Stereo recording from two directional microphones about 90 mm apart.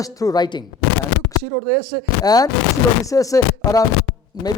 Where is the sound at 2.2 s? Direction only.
45° left (ahead or behind).